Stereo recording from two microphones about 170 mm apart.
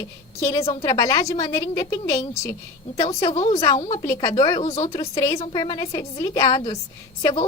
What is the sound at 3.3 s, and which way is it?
Speech, 40° left (ahead or behind).